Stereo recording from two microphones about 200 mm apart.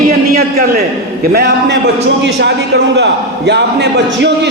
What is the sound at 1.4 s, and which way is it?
A man's voice, 60° right (ahead or behind).